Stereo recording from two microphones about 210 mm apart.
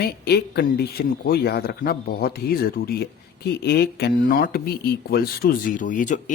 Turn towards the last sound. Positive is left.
turn(degrees=35)  # may be behind; listen again after turning